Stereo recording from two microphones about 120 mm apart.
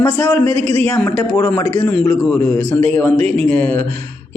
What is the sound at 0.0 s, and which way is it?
A man's voice, 10° left (ahead or behind).